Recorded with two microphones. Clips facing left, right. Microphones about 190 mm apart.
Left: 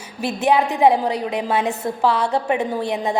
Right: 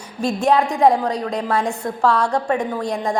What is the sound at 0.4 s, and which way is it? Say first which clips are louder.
A woman's voice: even; 5° left (ahead or behind).